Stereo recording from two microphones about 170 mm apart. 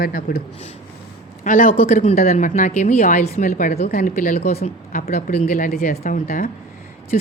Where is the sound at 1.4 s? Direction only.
50° left (ahead or behind).